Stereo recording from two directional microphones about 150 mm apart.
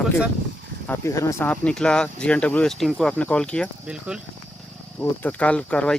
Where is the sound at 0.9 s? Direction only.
20° left (ahead or behind).